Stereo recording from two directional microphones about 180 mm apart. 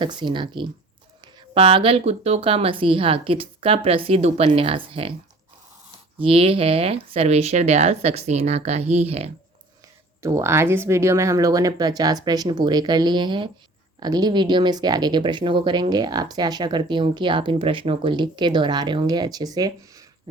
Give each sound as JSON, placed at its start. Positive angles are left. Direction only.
{"t": 0.0, "sound": "speech", "side_deg": -25}
{"t": 6.1, "sound": "speech", "side_deg": -30}
{"t": 10.2, "sound": "speech", "side_deg": -15}